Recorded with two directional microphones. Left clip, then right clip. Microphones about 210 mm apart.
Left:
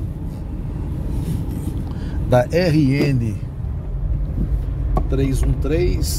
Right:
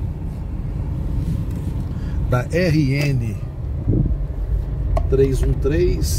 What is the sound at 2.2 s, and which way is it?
Speech, 20° left (ahead or behind).